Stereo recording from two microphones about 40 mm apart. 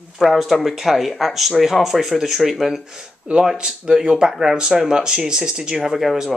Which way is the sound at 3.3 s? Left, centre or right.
Right.